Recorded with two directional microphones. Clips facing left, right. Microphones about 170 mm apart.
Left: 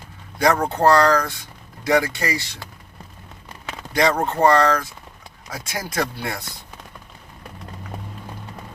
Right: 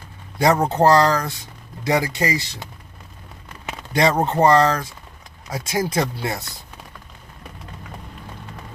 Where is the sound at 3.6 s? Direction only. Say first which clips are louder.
Right 1 dB; 25° right (ahead or behind).